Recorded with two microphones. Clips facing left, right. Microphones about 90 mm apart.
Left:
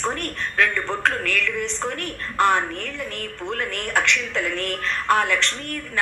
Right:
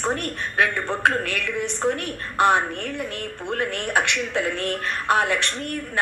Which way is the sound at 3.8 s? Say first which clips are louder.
Left 4 dB; 60° right (ahead or behind).